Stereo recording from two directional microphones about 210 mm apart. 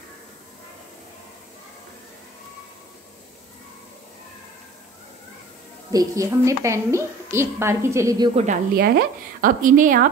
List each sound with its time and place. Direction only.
5.9 s a woman's voice: 15° right (ahead or behind)
8.7 s speech: 45° right (ahead or behind)